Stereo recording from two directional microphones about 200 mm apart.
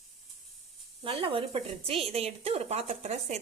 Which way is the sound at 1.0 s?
25° right (ahead or behind).